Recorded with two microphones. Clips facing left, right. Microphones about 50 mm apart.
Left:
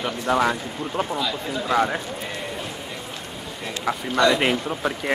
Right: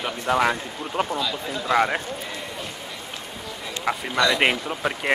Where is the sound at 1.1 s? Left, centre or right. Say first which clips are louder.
Left 1 dB; centre.